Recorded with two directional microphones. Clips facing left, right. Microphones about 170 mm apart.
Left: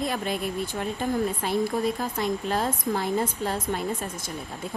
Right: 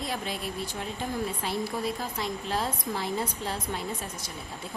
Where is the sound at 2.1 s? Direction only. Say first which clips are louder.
Left 5 dB; 50° left (ahead or behind).